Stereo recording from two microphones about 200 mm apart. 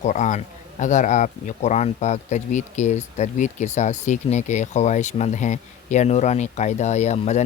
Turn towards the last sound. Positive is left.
turn(degrees=35)  # may be behind; listen again after turning